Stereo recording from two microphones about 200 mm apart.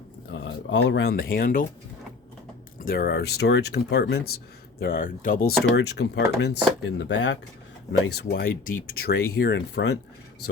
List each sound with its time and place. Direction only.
0.3 s speech: 65° left (ahead or behind); by 1.6 s 45° left (ahead or behind)
2.7 s speech: 45° left (ahead or behind)
5.7 s speech: 55° left (ahead or behind)
8.0 s speech: 50° left (ahead or behind)